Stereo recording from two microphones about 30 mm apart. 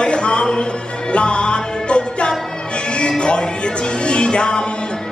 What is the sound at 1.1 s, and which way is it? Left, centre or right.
Music, left.